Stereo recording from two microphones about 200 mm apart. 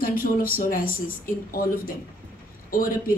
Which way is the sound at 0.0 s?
45° left (ahead or behind).